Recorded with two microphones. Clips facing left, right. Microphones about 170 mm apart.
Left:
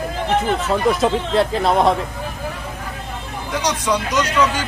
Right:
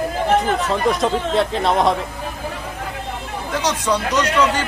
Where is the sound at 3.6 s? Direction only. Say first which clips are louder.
Even; 10° left (ahead or behind).